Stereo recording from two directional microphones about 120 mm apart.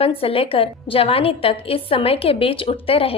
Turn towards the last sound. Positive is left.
turn(degrees=50)  # may be behind; listen again after turning